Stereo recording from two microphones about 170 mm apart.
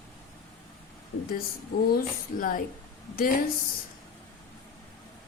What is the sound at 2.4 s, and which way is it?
Speech, 55° left (ahead or behind).